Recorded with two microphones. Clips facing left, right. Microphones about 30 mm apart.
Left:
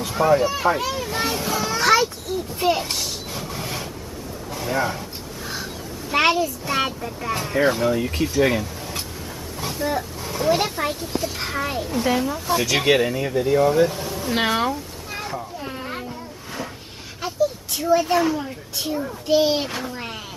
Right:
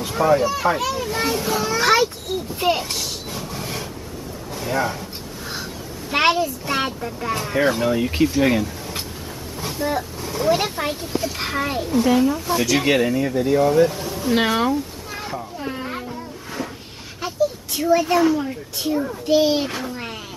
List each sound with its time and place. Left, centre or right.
0.0 s children playing: centre
0.9 s a child's voice: centre
1.8 s a child's voice: right
2.8 s a sound: centre
4.5 s speech: centre
6.1 s speech: centre
9.6 s vehicle: centre
10.2 s speech: centre
11.3 s speech: centre
11.9 s a child's voice: centre
12.8 s a sound: centre
17.7 s a child's voice: centre